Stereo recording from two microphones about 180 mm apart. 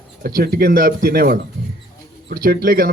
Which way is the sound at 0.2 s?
55° right (ahead or behind).